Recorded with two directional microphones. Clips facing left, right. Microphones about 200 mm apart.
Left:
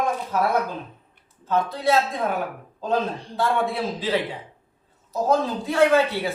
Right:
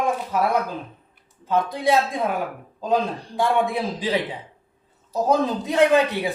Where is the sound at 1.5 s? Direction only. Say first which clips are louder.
Right 1 dB; 15° right (ahead or behind).